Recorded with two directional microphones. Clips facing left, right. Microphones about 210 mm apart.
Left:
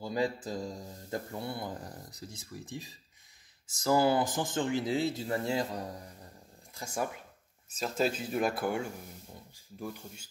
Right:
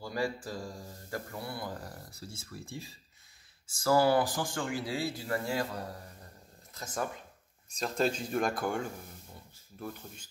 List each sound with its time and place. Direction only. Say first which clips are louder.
0.0 s speech: left 2 dB; 20° left (ahead or behind)